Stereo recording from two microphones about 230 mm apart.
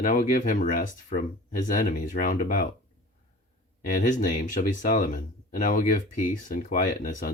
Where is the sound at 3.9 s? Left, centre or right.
Left.